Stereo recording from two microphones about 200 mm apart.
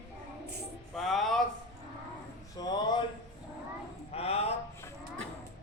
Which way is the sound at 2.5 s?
20° left (ahead or behind).